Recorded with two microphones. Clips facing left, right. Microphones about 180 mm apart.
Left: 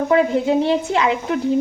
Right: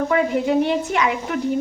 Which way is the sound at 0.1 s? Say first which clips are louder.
Left 5 dB; 25° left (ahead or behind).